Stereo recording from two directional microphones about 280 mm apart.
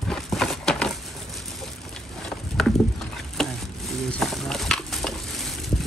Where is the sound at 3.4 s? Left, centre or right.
Centre.